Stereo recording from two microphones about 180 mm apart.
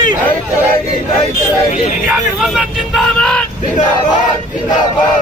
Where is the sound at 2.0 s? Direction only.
Centre (ahead or behind).